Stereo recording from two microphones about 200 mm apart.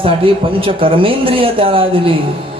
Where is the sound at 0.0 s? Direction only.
25° right (ahead or behind).